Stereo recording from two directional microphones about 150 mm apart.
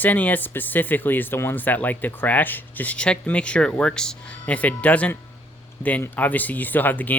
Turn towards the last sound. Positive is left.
turn(degrees=10)  # may be behind; listen again after turning